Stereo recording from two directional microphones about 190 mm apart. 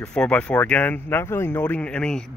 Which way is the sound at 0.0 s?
5° left (ahead or behind).